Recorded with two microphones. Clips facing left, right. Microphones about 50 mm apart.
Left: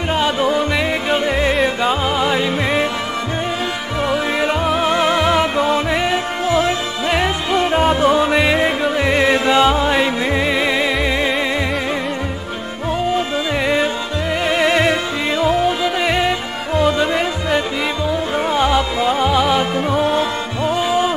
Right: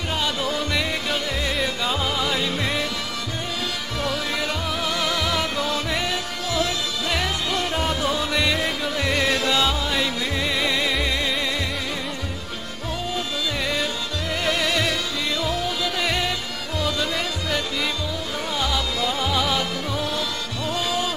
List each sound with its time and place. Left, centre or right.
0.1 s music: left
4.0 s music: left
14.4 s music: left